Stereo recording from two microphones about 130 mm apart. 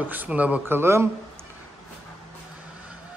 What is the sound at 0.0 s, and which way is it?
Speech, 15° right (ahead or behind).